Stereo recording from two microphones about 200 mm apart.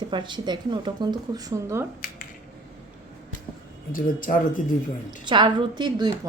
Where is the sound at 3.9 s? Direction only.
40° left (ahead or behind).